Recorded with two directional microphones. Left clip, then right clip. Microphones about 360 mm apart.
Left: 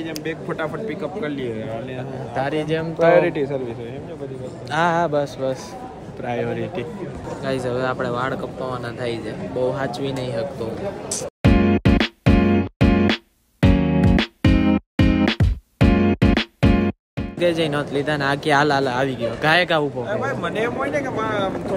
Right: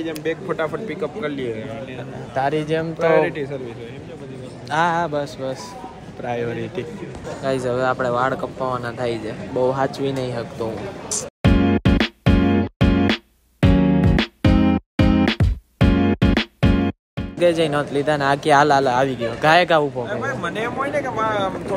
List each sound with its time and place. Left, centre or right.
0.0 s speech: centre
3.3 s a man's voice: left
4.6 s speech: centre
7.4 s a sound: centre